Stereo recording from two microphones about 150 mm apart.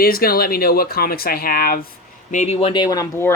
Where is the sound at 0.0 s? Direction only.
90° left.